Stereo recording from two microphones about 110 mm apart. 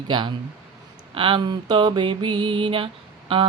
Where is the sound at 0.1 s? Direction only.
45° right (ahead or behind).